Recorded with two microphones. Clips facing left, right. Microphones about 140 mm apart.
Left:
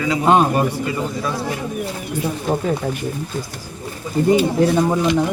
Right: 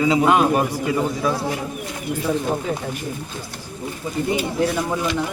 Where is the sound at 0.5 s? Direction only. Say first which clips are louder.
Even; 5° right (ahead or behind).